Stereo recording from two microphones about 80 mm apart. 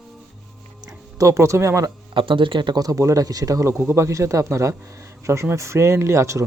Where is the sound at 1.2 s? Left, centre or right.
Right.